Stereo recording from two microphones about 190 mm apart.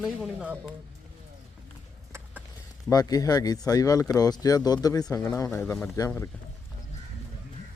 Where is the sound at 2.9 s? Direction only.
20° left (ahead or behind).